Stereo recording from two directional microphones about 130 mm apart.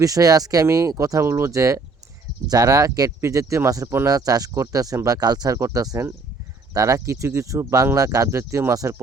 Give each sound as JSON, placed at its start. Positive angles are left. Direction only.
{"t": 0.0, "sound": "speech", "side_deg": -25}